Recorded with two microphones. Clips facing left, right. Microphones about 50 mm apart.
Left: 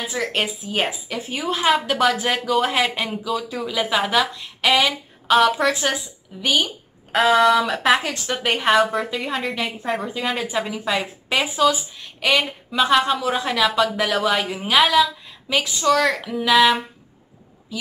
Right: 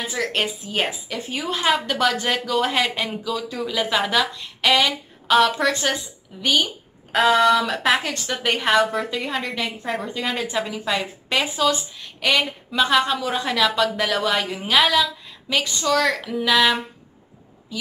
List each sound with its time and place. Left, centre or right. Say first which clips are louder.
0.0 s a woman's voice: even; centre